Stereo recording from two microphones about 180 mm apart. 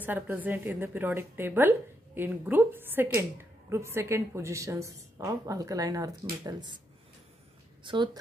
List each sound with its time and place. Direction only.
0.0 s a woman's voice: 10° right (ahead or behind)
7.8 s speech: 25° right (ahead or behind)